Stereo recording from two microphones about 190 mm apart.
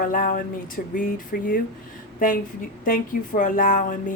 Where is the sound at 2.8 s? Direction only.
45° left (ahead or behind).